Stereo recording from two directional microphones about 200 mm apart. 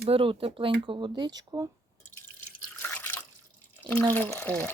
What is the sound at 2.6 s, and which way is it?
Drip, 10° left (ahead or behind).